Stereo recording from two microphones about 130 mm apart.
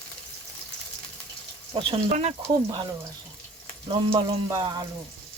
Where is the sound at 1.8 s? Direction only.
45° right (ahead or behind).